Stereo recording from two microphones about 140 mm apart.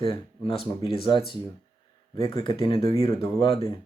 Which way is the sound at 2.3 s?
35° left (ahead or behind).